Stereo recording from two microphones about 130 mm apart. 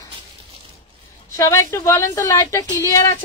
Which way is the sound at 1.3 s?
25° left (ahead or behind).